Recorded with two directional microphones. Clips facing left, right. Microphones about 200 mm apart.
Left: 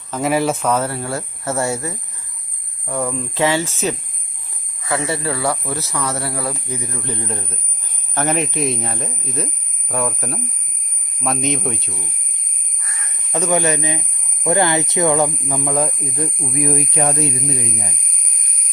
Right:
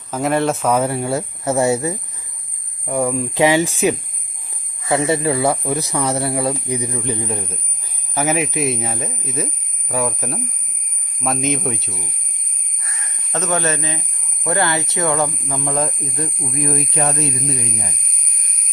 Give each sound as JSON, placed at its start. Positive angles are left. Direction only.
{"t": 0.1, "sound": "speech", "side_deg": 0}
{"t": 13.3, "sound": "speech", "side_deg": 15}